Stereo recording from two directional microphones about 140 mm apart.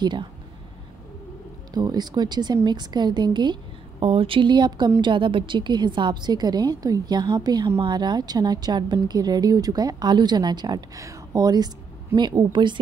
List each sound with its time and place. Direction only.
0.0 s a woman's voice: 35° right (ahead or behind)
1.7 s a woman's voice: 30° right (ahead or behind)